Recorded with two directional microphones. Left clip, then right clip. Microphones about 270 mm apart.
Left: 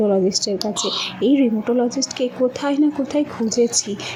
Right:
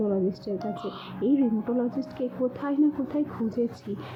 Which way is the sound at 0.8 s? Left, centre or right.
Centre.